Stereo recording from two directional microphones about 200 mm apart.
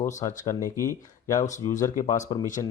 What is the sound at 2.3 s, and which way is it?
Speech, 25° left (ahead or behind).